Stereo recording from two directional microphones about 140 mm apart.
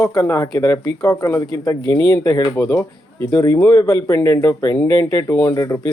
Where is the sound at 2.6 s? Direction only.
15° left (ahead or behind).